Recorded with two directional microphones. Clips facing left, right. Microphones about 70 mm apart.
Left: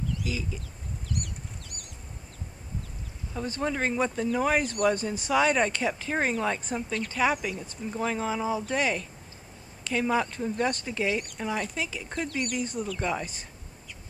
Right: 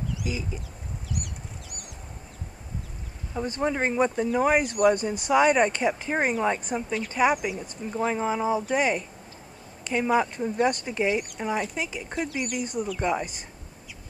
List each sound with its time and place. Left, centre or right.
0.1 s chicken: centre
3.5 s speech: centre
11.1 s speech: centre